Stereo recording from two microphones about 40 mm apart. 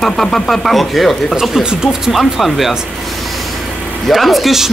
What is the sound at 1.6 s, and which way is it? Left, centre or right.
Speech, centre.